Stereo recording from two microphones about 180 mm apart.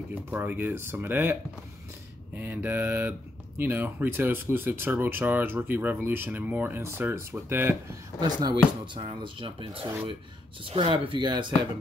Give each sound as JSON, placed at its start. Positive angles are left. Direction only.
{"t": 0.1, "sound": "speech", "side_deg": -10}
{"t": 8.2, "sound": "speech", "side_deg": -25}